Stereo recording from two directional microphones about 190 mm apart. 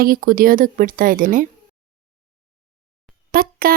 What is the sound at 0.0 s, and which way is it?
Speech, 50° right (ahead or behind).